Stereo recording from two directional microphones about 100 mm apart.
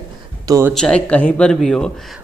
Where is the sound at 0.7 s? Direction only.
10° left (ahead or behind).